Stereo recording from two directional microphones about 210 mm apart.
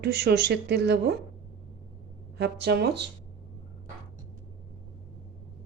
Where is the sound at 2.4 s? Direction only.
50° right (ahead or behind).